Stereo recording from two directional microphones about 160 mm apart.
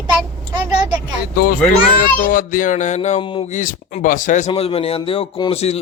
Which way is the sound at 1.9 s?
60° left (ahead or behind).